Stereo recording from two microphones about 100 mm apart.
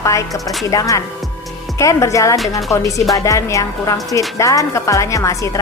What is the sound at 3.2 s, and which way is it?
Speech, 35° left (ahead or behind).